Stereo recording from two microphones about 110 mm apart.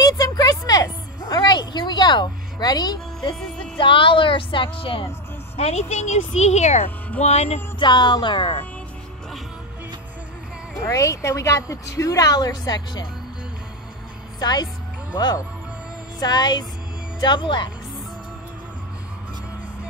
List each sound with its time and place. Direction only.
0.0 s a sound: 35° left (ahead or behind)
3.7 s speech: 50° left (ahead or behind)
5.6 s speech: 80° left
7.2 s music: 70° left (ahead or behind)
7.8 s speech: 45° left (ahead or behind); by 8.6 s 60° left (ahead or behind)
10.9 s a woman's voice: 30° left (ahead or behind)
14.4 s a woman's voice: 40° left (ahead or behind)